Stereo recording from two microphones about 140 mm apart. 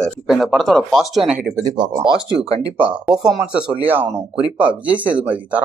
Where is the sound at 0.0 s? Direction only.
Centre (ahead or behind).